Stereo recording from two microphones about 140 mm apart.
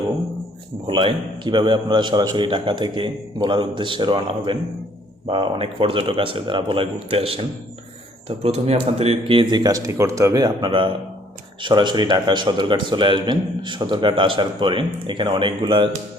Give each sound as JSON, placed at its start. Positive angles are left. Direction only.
{"t": 0.9, "sound": "a man's voice", "side_deg": -35}